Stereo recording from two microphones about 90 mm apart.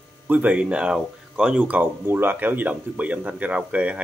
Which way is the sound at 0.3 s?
15° right (ahead or behind).